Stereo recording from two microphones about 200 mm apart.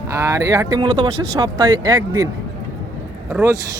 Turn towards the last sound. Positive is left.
turn(degrees=-15)  # may be behind; listen again after turning